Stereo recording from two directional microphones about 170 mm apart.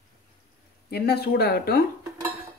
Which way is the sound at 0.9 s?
65° left (ahead or behind).